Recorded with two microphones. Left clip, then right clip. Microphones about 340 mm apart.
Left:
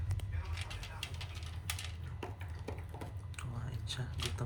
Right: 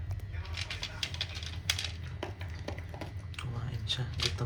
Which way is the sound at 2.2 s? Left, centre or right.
Centre.